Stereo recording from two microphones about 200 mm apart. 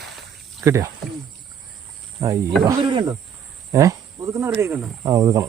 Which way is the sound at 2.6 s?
20° right (ahead or behind).